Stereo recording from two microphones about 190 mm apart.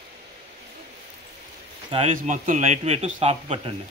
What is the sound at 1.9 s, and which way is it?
A man's voice, 35° right (ahead or behind).